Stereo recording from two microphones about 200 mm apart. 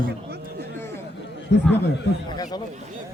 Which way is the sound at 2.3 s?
20° left (ahead or behind).